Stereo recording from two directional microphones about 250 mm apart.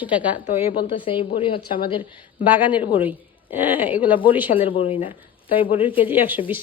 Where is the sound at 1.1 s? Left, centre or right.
Left.